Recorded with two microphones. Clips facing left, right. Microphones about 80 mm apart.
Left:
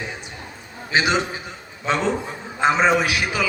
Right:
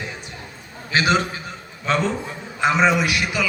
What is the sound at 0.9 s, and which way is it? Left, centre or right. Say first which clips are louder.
A man's voice: right 1 dB; centre.